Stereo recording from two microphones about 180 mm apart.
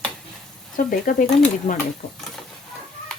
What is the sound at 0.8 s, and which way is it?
Speech, 50° left (ahead or behind).